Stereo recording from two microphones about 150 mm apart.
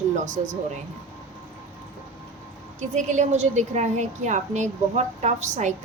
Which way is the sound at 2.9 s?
50° right (ahead or behind).